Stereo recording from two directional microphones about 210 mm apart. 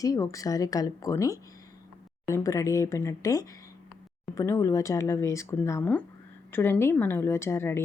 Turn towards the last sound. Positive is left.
turn(degrees=10)  # may be behind; listen again after turning